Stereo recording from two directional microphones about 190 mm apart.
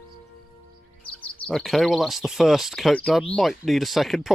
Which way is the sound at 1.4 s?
Centre (ahead or behind).